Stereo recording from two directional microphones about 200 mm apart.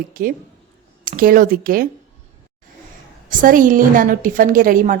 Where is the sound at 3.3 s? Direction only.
40° right (ahead or behind).